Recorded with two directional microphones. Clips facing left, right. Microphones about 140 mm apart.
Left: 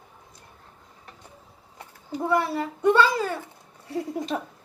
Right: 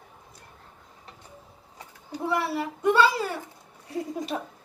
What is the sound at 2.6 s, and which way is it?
Speech, 5° right (ahead or behind).